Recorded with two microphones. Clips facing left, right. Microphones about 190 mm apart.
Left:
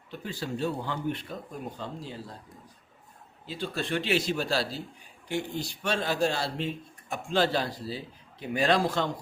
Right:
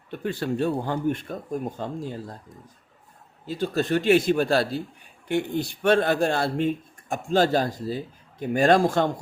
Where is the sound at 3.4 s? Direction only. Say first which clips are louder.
Right 8 dB; 45° right (ahead or behind).